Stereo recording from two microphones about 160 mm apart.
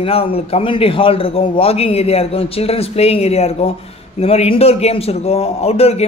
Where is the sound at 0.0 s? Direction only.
35° left (ahead or behind).